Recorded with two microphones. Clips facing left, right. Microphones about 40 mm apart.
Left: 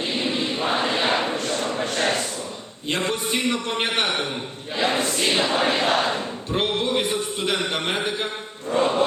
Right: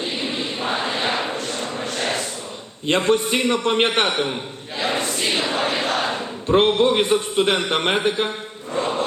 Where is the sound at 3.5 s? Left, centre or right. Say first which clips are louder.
Right 8 dB; right.